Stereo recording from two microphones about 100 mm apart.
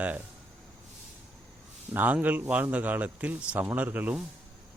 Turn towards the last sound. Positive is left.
turn(degrees=-15)  # may be behind; listen again after turning